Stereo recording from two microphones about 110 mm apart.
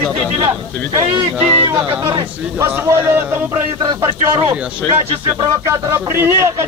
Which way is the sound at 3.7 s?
40° right (ahead or behind).